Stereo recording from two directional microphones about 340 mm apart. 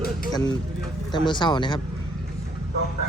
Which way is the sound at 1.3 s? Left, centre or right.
Centre.